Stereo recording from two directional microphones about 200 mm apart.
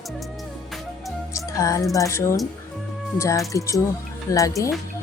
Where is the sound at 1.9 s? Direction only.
15° left (ahead or behind).